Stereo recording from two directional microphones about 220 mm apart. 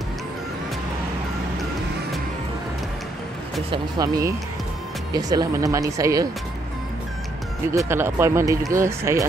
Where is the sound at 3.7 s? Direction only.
15° right (ahead or behind).